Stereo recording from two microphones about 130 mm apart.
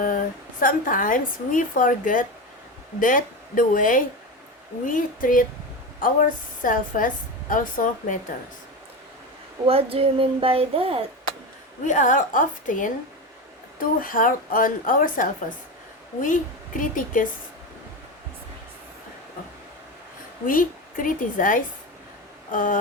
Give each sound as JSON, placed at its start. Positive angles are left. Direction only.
{"t": 0.6, "sound": "a woman's voice", "side_deg": 90}
{"t": 9.6, "sound": "speech", "side_deg": -45}
{"t": 11.9, "sound": "a woman's voice", "side_deg": 80}
{"t": 20.5, "sound": "a woman's voice", "side_deg": 90}